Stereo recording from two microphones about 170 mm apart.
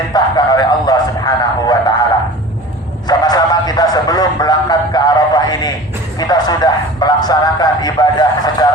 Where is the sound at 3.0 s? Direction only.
25° left (ahead or behind).